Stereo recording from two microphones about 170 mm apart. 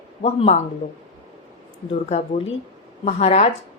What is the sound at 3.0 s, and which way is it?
Speech, 40° left (ahead or behind).